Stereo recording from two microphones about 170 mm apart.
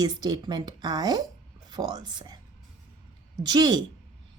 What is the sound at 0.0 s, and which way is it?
A woman's voice, 25° right (ahead or behind).